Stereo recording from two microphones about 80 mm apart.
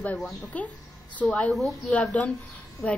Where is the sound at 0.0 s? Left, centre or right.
Centre.